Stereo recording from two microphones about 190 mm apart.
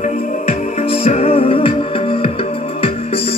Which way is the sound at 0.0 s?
40° left (ahead or behind).